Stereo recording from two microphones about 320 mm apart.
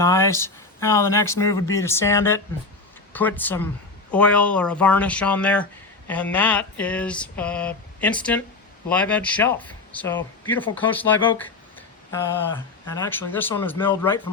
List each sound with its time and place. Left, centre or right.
0.0 s speech: centre
13.0 s speech: centre